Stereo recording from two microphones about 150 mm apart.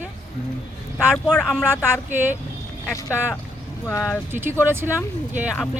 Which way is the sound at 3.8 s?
15° left (ahead or behind).